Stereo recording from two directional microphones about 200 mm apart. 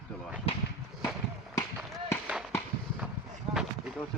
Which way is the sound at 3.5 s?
5° right (ahead or behind).